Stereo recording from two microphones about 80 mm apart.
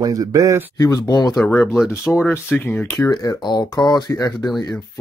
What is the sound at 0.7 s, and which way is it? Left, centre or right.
Speech, left.